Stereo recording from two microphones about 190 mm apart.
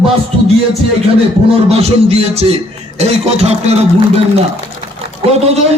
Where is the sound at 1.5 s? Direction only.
35° right (ahead or behind).